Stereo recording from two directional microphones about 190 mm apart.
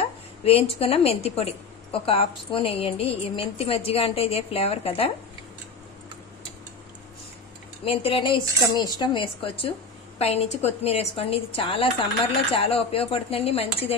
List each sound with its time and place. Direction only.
0.4 s a woman's voice: 30° left (ahead or behind)
7.8 s a woman's voice: 30° left (ahead or behind)